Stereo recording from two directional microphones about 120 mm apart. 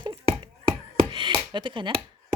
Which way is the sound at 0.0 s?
40° right (ahead or behind).